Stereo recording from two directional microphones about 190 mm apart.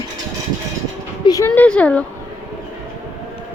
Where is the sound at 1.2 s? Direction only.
20° left (ahead or behind).